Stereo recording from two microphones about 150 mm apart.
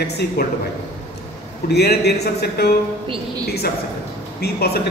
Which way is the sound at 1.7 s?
90° left.